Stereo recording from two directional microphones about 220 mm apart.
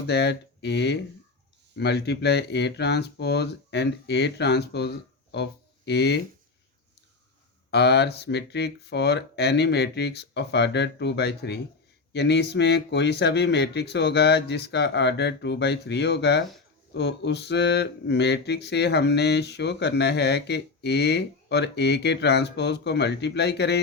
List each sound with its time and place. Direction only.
0.1 s speech: 50° left (ahead or behind)
7.7 s speech: 50° left (ahead or behind)